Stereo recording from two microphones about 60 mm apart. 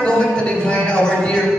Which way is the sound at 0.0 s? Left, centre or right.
Centre.